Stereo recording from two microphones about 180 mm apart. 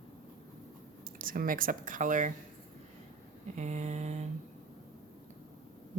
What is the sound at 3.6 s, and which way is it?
Speech, 40° right (ahead or behind).